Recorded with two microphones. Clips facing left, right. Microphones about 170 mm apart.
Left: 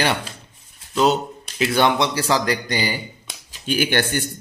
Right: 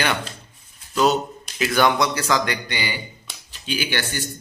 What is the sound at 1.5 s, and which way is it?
A man's voice, 30° left (ahead or behind).